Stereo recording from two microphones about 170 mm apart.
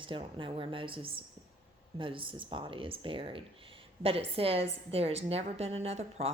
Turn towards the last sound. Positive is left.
turn(degrees=-35)  # may be behind; listen again after turning